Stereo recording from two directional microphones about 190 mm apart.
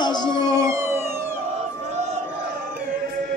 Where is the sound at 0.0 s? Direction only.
25° left (ahead or behind).